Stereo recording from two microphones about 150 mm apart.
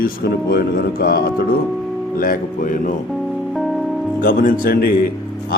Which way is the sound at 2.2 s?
65° left (ahead or behind).